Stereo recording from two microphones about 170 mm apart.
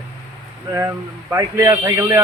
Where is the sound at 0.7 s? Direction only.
15° right (ahead or behind).